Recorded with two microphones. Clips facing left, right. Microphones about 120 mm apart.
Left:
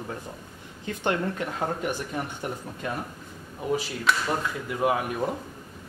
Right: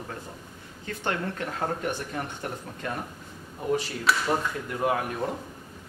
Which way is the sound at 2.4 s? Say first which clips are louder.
Left 2 dB; 10° left (ahead or behind).